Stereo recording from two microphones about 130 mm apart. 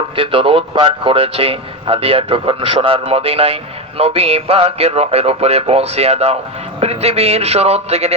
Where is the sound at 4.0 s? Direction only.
50° right (ahead or behind).